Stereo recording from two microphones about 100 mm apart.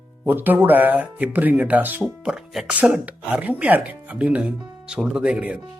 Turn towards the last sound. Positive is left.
turn(degrees=-15)  # may be behind; listen again after turning